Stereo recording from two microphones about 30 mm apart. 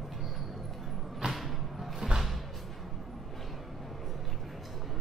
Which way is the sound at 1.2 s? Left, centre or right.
Right.